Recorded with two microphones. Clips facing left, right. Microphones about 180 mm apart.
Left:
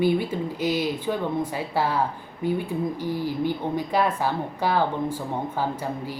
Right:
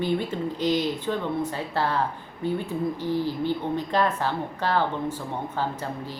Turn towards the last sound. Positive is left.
turn(degrees=10)  # may be behind; listen again after turning